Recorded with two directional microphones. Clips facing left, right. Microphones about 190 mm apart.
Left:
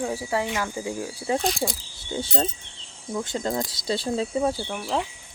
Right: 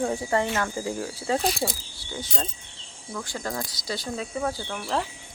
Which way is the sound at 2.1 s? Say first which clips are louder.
Left 6 dB; 30° left (ahead or behind).